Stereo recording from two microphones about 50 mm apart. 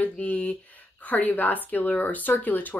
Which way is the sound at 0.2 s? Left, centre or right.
Left.